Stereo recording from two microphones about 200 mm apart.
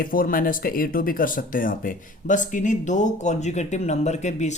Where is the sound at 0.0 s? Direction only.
45° left (ahead or behind).